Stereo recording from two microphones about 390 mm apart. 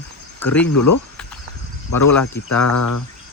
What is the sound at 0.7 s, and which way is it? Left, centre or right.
Speech, left.